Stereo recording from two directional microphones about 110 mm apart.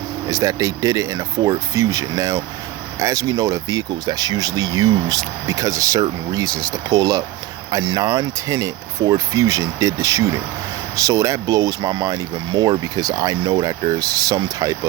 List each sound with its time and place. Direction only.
0.3 s speech: 30° right (ahead or behind)